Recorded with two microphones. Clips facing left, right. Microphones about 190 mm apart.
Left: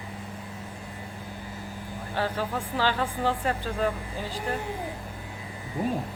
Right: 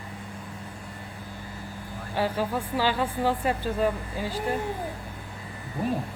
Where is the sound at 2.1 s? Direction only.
10° right (ahead or behind).